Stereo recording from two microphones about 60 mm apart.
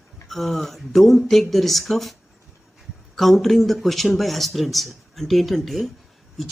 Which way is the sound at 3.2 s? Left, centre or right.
Centre.